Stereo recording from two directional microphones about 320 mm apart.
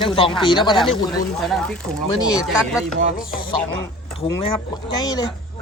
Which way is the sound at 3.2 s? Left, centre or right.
Left.